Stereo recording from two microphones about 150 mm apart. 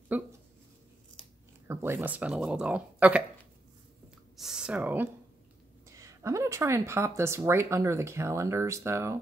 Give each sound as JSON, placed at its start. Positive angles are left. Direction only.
{"t": 0.1, "sound": "dog", "side_deg": -10}
{"t": 1.7, "sound": "speech", "side_deg": -15}
{"t": 4.4, "sound": "a sound", "side_deg": -5}
{"t": 5.9, "sound": "speech", "side_deg": -20}